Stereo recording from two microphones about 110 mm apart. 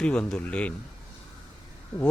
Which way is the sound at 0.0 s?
10° left (ahead or behind).